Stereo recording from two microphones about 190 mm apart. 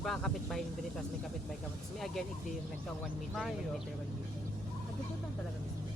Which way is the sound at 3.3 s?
Centre (ahead or behind).